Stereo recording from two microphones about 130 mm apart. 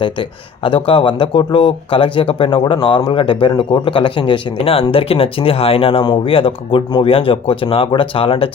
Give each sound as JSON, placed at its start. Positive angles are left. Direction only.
{"t": 0.0, "sound": "speech", "side_deg": 40}